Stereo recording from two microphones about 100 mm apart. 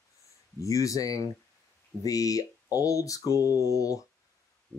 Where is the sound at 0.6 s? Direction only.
35° left (ahead or behind).